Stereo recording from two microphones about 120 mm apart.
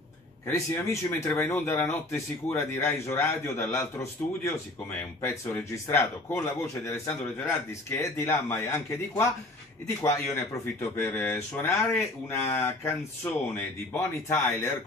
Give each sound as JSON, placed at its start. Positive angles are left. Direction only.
{"t": 0.5, "sound": "speech", "side_deg": 20}
{"t": 13.9, "sound": "speech", "side_deg": 15}